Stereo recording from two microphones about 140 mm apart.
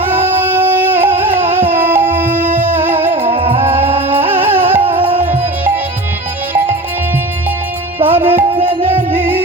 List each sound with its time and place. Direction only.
0.0 s music: 15° right (ahead or behind)
3.2 s music: 40° right (ahead or behind)
3.9 s music: 15° right (ahead or behind)
8.0 s music: 15° right (ahead or behind)